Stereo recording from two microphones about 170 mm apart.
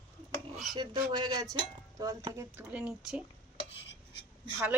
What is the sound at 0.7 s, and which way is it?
Speech, 25° right (ahead or behind).